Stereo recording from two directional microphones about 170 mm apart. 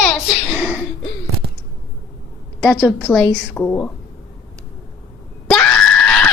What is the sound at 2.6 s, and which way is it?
A woman's voice, centre (ahead or behind).